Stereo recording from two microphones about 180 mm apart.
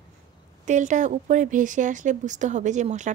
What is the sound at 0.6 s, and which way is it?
Speech, 45° right (ahead or behind).